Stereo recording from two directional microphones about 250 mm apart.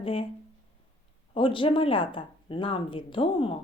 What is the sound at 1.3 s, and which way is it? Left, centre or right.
Speech, centre.